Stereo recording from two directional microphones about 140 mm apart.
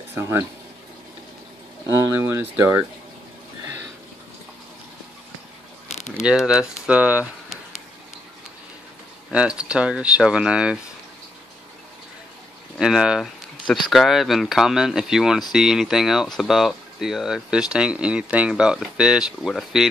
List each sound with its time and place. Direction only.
0.1 s speech: 15° right (ahead or behind)
1.9 s speech: 15° right (ahead or behind)
5.9 s a sound: 55° left (ahead or behind)
6.2 s speech: 5° right (ahead or behind)
9.3 s speech: 10° right (ahead or behind)
12.7 s speech: 5° right (ahead or behind)